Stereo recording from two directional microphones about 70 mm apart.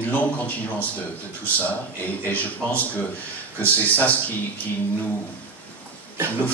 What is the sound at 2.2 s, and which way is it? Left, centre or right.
Speech, left.